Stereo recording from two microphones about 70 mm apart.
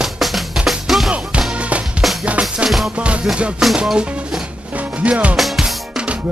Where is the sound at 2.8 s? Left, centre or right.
Centre.